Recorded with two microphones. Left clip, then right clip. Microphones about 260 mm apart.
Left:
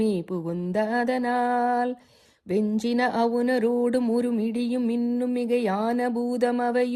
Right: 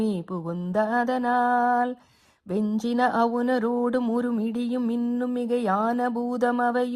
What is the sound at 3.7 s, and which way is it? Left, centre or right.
Speech, right.